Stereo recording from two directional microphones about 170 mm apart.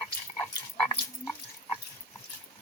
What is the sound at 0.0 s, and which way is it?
Dog, 5° left (ahead or behind).